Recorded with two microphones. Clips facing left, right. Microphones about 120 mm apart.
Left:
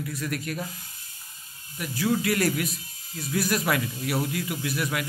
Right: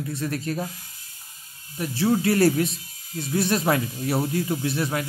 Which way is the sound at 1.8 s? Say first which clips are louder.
Right 4 dB; 30° right (ahead or behind).